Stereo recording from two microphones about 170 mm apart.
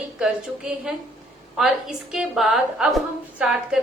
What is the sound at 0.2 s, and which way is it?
A woman's voice, 5° right (ahead or behind).